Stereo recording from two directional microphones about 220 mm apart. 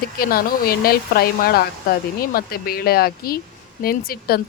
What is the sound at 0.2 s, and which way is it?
Speech, 40° left (ahead or behind).